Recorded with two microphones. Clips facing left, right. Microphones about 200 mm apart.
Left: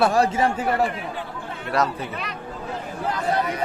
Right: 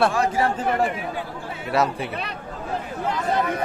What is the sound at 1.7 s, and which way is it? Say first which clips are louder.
Speech: right 1 dB; 10° right (ahead or behind).